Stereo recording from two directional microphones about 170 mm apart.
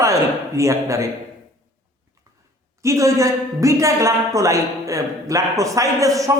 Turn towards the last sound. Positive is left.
turn(degrees=-20)  # may be behind; listen again after turning